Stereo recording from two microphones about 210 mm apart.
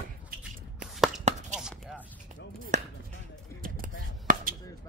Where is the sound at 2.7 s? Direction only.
35° right (ahead or behind).